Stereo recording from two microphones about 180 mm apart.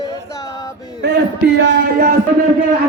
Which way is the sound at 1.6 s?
65° right (ahead or behind).